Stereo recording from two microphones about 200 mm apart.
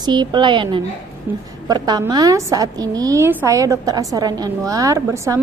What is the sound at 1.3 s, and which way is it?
A woman's voice, 10° right (ahead or behind).